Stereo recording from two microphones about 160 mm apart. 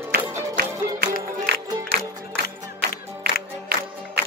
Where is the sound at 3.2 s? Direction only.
70° right (ahead or behind).